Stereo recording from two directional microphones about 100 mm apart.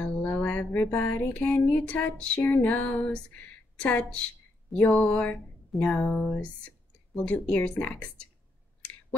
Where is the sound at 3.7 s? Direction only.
10° left (ahead or behind).